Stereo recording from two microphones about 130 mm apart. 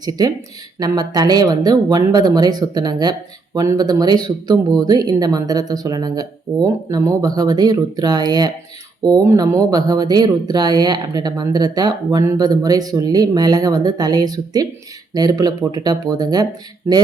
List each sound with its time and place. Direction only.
0.8 s speech: 30° right (ahead or behind)